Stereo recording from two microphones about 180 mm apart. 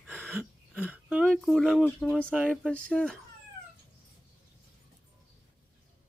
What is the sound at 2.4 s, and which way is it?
Speech, 5° left (ahead or behind).